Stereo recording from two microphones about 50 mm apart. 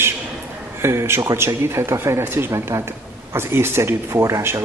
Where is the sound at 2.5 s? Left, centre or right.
Right.